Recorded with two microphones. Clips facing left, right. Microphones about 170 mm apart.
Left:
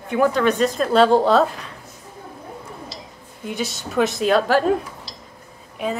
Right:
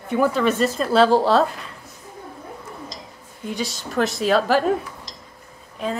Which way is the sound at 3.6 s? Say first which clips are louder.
Left 2 dB; centre (ahead or behind).